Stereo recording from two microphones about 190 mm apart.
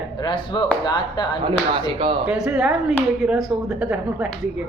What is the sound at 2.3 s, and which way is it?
Speech, 5° right (ahead or behind).